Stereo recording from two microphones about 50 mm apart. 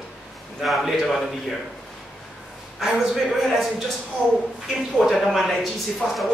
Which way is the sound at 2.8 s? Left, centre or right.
Centre.